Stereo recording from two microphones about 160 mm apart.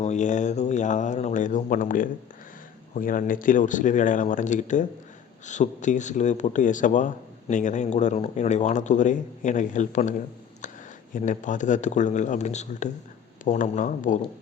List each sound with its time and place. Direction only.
0.0 s speech: 50° left (ahead or behind)